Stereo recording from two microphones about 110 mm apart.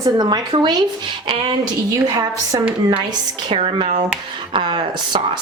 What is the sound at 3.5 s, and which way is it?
Speech, 65° right (ahead or behind).